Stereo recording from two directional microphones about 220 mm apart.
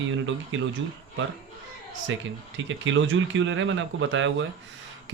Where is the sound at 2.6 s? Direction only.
60° right (ahead or behind).